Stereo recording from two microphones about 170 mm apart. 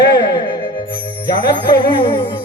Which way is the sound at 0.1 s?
25° left (ahead or behind).